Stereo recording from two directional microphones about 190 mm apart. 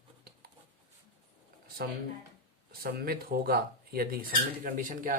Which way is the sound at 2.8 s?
50° right (ahead or behind).